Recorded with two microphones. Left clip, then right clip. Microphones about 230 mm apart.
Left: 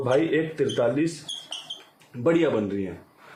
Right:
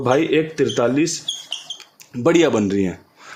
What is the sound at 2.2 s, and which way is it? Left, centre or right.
Speech, right.